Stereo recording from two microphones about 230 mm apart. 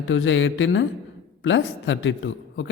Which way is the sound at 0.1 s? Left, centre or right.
Left.